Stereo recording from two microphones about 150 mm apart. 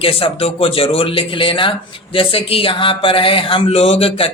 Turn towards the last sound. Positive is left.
turn(degrees=40)  # may be behind; listen again after turning